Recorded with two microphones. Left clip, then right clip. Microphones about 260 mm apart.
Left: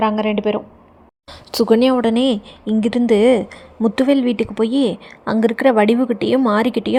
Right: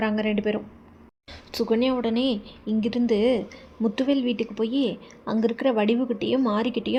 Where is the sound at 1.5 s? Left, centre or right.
Left.